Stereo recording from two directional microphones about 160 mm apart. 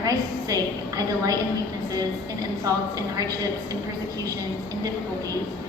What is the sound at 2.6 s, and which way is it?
Speech, 20° right (ahead or behind).